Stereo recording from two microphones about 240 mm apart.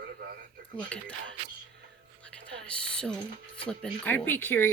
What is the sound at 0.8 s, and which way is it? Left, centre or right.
Speech, centre.